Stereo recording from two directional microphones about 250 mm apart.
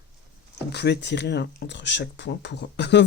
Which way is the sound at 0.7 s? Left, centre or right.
Left.